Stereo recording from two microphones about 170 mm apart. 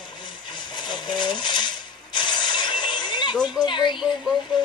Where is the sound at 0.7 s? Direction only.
25° left (ahead or behind).